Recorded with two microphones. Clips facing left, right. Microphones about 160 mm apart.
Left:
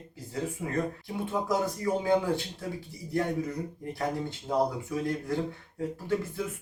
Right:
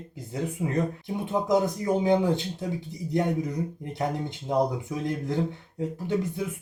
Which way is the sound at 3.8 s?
20° right (ahead or behind).